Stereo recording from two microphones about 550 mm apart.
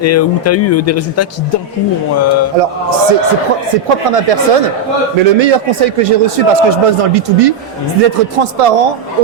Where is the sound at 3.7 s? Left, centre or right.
Right.